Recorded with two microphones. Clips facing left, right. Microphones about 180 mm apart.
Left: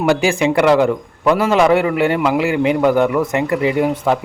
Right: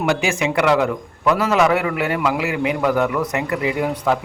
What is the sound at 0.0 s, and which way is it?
A man's voice, 35° left (ahead or behind).